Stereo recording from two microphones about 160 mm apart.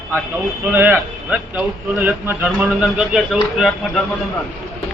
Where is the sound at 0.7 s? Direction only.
15° right (ahead or behind).